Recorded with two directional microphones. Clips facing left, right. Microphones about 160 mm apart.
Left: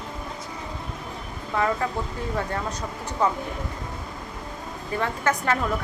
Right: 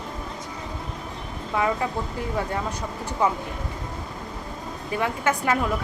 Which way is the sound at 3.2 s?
10° right (ahead or behind).